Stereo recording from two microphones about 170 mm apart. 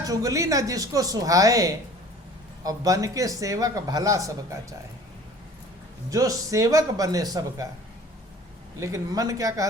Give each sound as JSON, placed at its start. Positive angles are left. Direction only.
{"t": 0.0, "sound": "speech", "side_deg": -20}
{"t": 6.1, "sound": "speech", "side_deg": -20}
{"t": 8.8, "sound": "speech", "side_deg": -20}